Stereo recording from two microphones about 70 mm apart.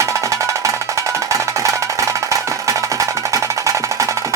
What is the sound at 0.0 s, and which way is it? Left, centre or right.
Music, right.